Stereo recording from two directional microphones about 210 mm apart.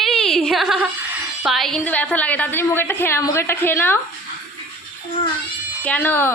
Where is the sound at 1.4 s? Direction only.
Centre (ahead or behind).